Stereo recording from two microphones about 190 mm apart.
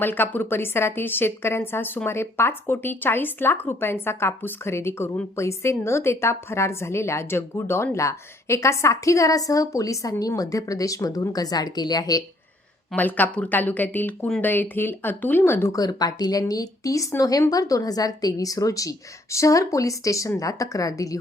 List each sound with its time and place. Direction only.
0.0 s a woman's voice: 10° left (ahead or behind)
12.9 s a woman's voice: 10° left (ahead or behind)